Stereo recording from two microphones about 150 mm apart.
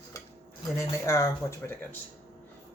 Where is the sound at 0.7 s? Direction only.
20° left (ahead or behind).